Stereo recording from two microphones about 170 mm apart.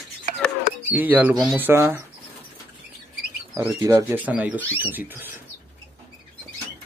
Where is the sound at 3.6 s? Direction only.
15° right (ahead or behind).